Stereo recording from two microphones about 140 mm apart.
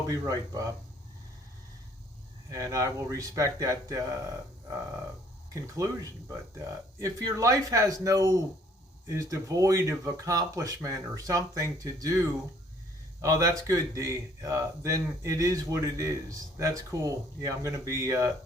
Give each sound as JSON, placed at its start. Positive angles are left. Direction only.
{"t": 0.1, "sound": "speech", "side_deg": -25}
{"t": 2.5, "sound": "speech", "side_deg": -20}
{"t": 7.0, "sound": "speech", "side_deg": -25}